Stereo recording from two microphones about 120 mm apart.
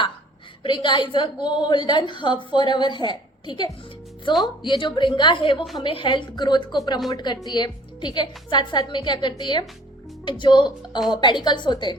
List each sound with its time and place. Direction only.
0.6 s a woman's voice: 40° left (ahead or behind)